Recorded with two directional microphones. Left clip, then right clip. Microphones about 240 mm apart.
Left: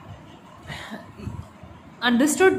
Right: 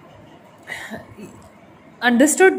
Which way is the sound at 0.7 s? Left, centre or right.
Centre.